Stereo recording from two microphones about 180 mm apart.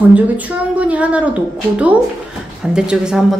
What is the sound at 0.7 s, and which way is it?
Speech, 5° right (ahead or behind).